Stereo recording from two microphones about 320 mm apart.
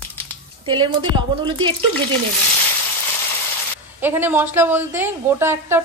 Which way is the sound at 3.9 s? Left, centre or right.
Centre.